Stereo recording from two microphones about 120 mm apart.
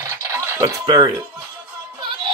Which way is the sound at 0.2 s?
25° right (ahead or behind).